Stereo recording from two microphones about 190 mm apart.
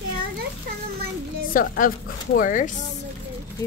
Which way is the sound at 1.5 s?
45° left (ahead or behind).